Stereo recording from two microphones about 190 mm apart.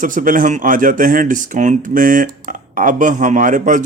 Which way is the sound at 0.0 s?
45° right (ahead or behind).